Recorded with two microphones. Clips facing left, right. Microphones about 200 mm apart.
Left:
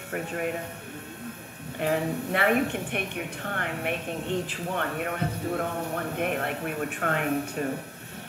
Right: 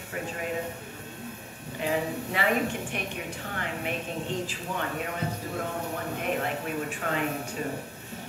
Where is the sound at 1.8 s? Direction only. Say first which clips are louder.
Left 2 dB; 55° left (ahead or behind).